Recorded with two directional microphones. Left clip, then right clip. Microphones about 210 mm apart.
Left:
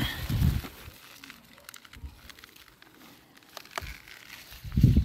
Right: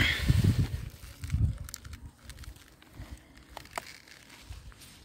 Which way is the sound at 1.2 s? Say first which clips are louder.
Right 9 dB; 25° right (ahead or behind).